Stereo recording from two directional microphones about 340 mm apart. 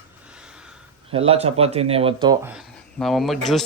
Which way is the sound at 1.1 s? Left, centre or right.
Centre.